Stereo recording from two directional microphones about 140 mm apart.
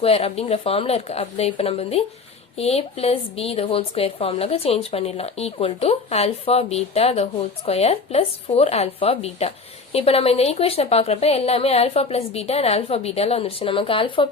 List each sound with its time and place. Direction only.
0.0 s a woman's voice: 45° left (ahead or behind)